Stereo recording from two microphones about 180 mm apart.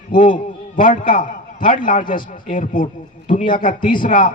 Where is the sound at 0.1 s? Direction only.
45° left (ahead or behind).